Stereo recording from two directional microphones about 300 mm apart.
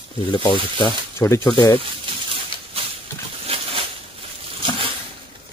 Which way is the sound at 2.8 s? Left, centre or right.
Centre.